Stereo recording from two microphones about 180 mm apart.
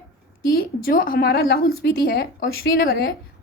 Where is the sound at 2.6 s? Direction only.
55° left (ahead or behind).